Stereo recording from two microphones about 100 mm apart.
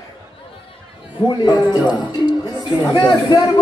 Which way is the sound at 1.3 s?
50° left (ahead or behind).